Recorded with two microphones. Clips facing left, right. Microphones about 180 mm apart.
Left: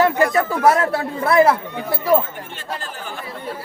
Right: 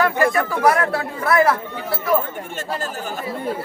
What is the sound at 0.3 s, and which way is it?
Speech, 25° left (ahead or behind).